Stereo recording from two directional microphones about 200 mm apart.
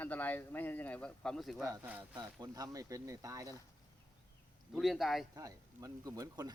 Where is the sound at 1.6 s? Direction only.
15° right (ahead or behind).